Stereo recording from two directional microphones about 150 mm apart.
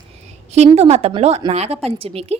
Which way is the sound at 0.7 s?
45° right (ahead or behind).